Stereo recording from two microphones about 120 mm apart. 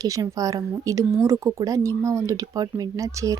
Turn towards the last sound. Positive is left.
turn(degrees=-25)  # may be behind; listen again after turning